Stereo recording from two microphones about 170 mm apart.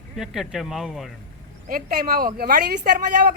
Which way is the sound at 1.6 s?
55° right (ahead or behind).